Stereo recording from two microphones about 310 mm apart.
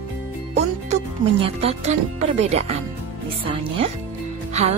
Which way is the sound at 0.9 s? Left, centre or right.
Centre.